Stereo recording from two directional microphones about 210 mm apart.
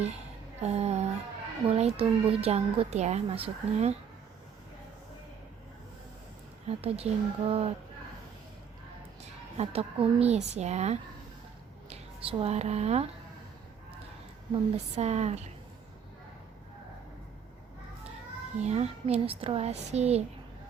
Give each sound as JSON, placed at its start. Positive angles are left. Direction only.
{"t": 0.6, "sound": "a woman's voice", "side_deg": -30}
{"t": 6.7, "sound": "a woman's voice", "side_deg": -30}
{"t": 9.2, "sound": "a woman's voice", "side_deg": -30}
{"t": 14.5, "sound": "a woman's voice", "side_deg": -30}
{"t": 18.6, "sound": "a woman's voice", "side_deg": -30}